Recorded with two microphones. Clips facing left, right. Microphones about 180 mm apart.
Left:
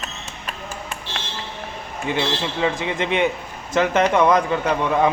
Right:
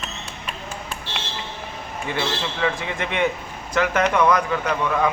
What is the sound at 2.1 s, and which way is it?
Speech, 20° left (ahead or behind).